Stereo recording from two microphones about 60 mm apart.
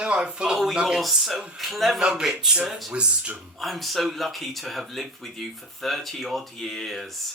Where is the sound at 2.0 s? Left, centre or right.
Centre.